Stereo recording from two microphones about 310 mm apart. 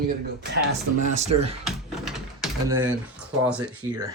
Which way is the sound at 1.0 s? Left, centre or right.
Right.